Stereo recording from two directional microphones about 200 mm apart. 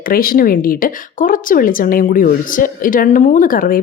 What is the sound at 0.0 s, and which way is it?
A woman's voice, 45° left (ahead or behind).